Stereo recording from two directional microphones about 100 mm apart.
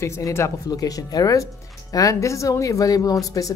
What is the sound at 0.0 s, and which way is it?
Speech, 30° left (ahead or behind).